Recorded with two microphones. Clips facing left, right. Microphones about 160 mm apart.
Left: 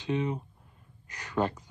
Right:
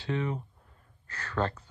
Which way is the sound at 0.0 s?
20° left (ahead or behind).